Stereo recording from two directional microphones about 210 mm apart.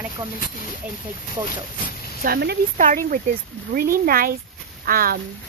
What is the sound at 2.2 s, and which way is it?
Speech, 50° right (ahead or behind).